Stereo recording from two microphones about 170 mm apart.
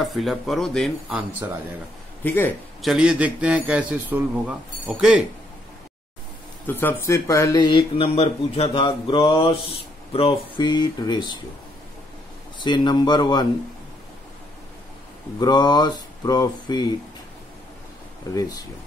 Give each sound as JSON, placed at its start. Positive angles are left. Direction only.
{"t": 0.0, "sound": "speech", "side_deg": 0}
{"t": 2.2, "sound": "a man's voice", "side_deg": 10}
{"t": 2.8, "sound": "a man's voice", "side_deg": -5}
{"t": 6.6, "sound": "speech", "side_deg": 10}
{"t": 12.5, "sound": "speech", "side_deg": 25}
{"t": 15.3, "sound": "speech", "side_deg": 25}